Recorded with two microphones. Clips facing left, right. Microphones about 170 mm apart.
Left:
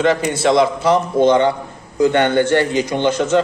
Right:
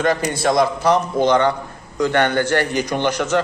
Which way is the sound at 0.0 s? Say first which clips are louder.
Left 3 dB; 25° left (ahead or behind).